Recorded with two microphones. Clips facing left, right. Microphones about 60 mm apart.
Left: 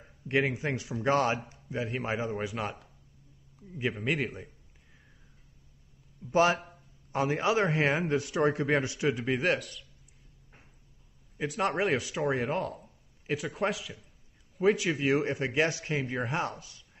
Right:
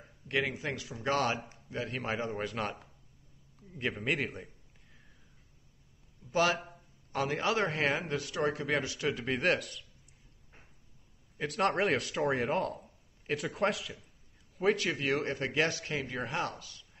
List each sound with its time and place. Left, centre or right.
0.3 s speech: left
1.7 s a man's voice: centre
6.3 s speech: left
7.2 s a man's voice: centre
7.6 s speech: left
9.2 s speech: centre
11.3 s a man's voice: centre; by 16.8 s left